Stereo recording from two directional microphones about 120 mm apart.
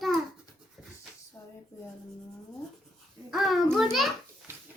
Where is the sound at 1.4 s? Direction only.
25° left (ahead or behind).